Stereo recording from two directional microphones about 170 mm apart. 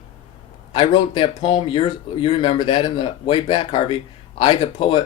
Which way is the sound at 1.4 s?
30° left (ahead or behind).